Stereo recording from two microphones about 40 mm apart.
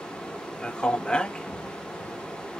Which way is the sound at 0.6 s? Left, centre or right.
Left.